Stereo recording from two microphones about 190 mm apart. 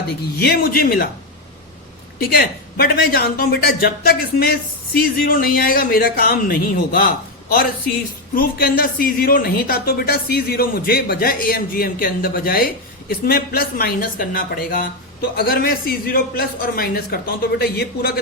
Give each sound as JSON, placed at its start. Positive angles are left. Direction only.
{"t": 0.3, "sound": "speech", "side_deg": 55}
{"t": 2.1, "sound": "speech", "side_deg": 55}
{"t": 8.4, "sound": "speech", "side_deg": 50}